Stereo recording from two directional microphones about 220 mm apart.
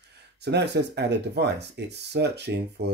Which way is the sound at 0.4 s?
50° right (ahead or behind).